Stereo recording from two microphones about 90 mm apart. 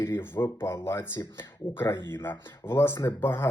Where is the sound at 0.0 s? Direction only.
25° left (ahead or behind).